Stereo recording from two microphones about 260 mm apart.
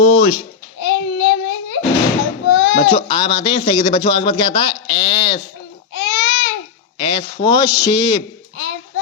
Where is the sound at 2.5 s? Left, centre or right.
Left.